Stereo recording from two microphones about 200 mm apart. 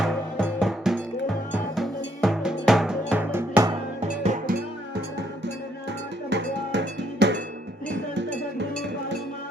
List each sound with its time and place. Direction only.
0.0 s music: 5° left (ahead or behind)
3.7 s music: 35° right (ahead or behind)
6.3 s music: 60° right (ahead or behind)